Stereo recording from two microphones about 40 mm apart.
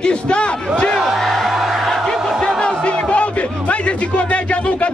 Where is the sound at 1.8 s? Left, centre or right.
Centre.